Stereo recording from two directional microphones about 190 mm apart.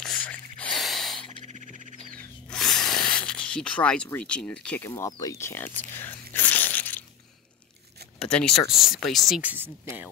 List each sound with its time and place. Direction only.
0.0 s gasp: 5° left (ahead or behind)
1.4 s bird: 40° right (ahead or behind)
2.5 s a sound: 5° left (ahead or behind)
5.1 s tearing: 15° left (ahead or behind)
8.2 s speech: 5° left (ahead or behind)